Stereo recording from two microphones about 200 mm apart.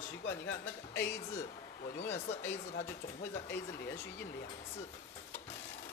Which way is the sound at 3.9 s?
15° left (ahead or behind).